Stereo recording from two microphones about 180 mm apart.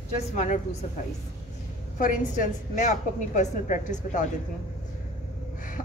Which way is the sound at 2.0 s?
50° left (ahead or behind).